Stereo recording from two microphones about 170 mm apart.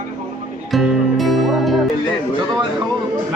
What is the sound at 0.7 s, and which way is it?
Music, centre (ahead or behind).